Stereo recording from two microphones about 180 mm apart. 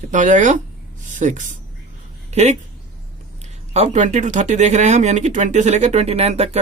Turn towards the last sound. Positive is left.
turn(degrees=-35)  # may be behind; listen again after turning